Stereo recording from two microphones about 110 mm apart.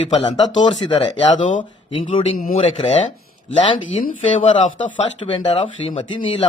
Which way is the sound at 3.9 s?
90° left.